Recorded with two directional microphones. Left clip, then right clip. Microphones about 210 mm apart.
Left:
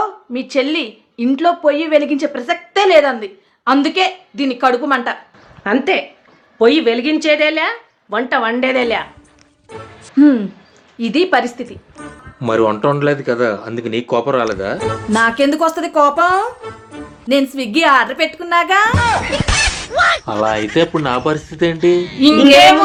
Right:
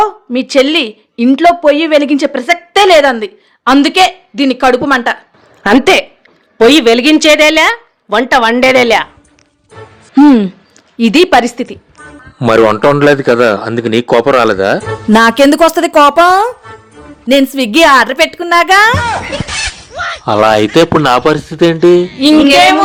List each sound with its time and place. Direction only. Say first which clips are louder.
0.0 s a woman's voice: right 9 dB; 50° right (ahead or behind)
10.9 s a woman's voice: right 7 dB; 55° right (ahead or behind)
15.1 s a woman's voice: right 8 dB; 55° right (ahead or behind)
18.9 s speech: right 1 dB; centre (ahead or behind)
20.2 s a woman's voice: right 9 dB; 45° right (ahead or behind)